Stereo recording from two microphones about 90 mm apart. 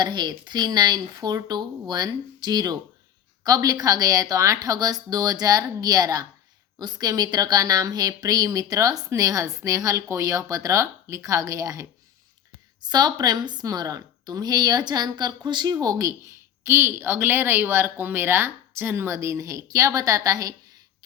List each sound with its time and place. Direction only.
0.0 s a woman's voice: 50° right (ahead or behind); by 11.9 s 35° right (ahead or behind)
12.8 s a woman's voice: 50° right (ahead or behind)
15.7 s speech: 45° right (ahead or behind)
16.6 s speech: 30° right (ahead or behind)